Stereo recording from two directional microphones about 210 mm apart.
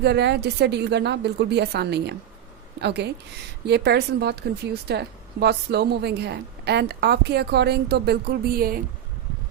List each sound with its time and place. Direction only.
0.0 s a woman's voice: 50° right (ahead or behind)